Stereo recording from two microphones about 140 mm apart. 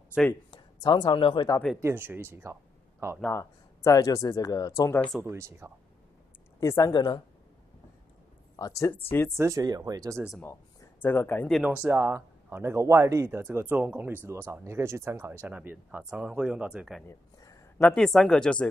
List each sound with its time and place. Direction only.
0.5 s speech: 30° left (ahead or behind)
1.8 s speech: 15° right (ahead or behind)
3.3 s speech: 25° left (ahead or behind)
5.2 s speech: 20° right (ahead or behind)
6.6 s speech: 20° left (ahead or behind)
8.5 s speech: 25° left (ahead or behind)
9.4 s speech: 25° right (ahead or behind)
10.4 s speech: 15° left (ahead or behind)
11.6 s speech: 10° right (ahead or behind)
17.1 s a sound: 20° left (ahead or behind)
17.8 s speech: 5° left (ahead or behind)